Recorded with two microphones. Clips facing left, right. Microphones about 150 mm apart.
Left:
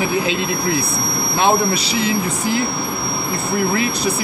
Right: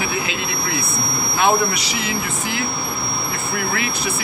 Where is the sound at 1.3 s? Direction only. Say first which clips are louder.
Left 2 dB; 30° left (ahead or behind).